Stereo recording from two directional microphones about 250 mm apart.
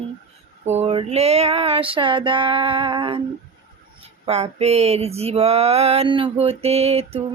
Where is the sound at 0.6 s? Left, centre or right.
Right.